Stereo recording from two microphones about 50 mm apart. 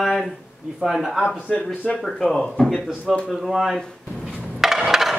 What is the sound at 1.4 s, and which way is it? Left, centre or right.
Speech, left.